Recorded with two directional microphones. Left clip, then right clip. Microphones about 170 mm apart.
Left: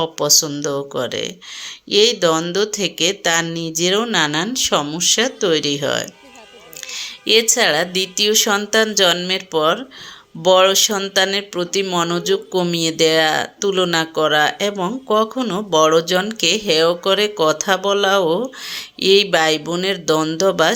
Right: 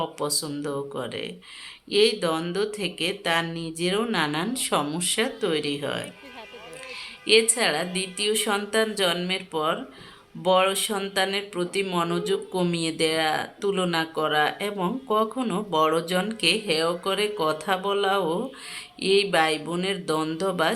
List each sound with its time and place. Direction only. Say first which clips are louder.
0.0 s speech: left 11 dB; 35° left (ahead or behind)
6.9 s a sound: left 5 dB; 35° left (ahead or behind)
7.5 s speech: left 9 dB; 35° left (ahead or behind)